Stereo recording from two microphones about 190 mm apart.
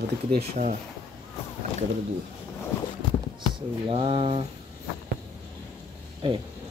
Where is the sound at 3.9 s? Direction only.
30° right (ahead or behind).